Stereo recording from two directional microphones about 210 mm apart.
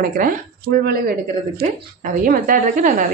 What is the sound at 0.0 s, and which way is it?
A woman's voice, 40° right (ahead or behind).